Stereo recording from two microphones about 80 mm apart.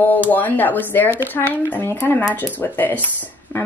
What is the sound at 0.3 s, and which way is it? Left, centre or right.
Speech, left.